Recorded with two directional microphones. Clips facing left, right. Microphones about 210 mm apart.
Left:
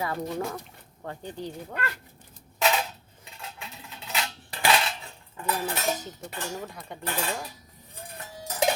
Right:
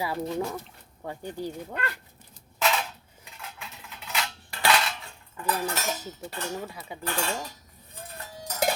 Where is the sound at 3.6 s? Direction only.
25° left (ahead or behind).